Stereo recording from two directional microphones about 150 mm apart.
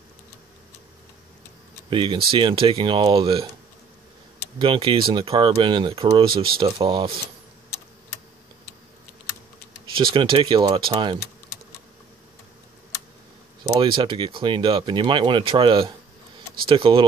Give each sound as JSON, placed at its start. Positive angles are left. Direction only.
{"t": 1.9, "sound": "speech", "side_deg": -35}
{"t": 4.6, "sound": "speech", "side_deg": -35}
{"t": 6.3, "sound": "speech", "side_deg": -85}
{"t": 6.6, "sound": "speech", "side_deg": -35}
{"t": 10.1, "sound": "speech", "side_deg": -35}
{"t": 13.7, "sound": "speech", "side_deg": -35}